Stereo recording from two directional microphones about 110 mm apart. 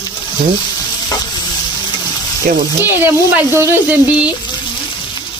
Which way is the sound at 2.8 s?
20° right (ahead or behind).